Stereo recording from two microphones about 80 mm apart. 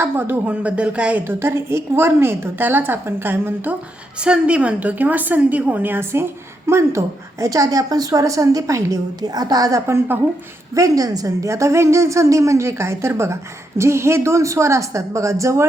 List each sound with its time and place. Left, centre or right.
0.0 s a woman's voice: right
0.5 s speech: centre
1.2 s a woman's voice: right
4.2 s a woman's voice: centre; by 9.8 s right
9.8 s a woman's voice: right
10.8 s a woman's voice: right